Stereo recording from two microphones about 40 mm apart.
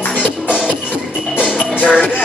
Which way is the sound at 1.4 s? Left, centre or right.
Centre.